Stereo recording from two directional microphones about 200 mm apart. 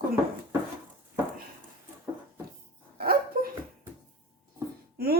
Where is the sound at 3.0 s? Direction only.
50° right (ahead or behind).